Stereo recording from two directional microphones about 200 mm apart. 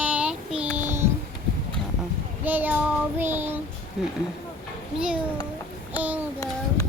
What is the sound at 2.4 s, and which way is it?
A child's voice, 10° right (ahead or behind).